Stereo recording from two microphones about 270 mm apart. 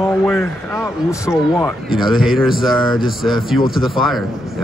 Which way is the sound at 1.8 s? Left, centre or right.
Centre.